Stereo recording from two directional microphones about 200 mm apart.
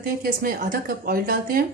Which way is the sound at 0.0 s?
45° right (ahead or behind).